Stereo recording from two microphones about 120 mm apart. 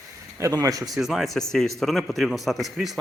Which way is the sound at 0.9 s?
Centre (ahead or behind).